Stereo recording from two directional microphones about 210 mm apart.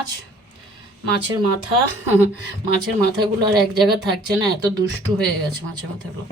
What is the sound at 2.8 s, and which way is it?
Speech, 20° right (ahead or behind).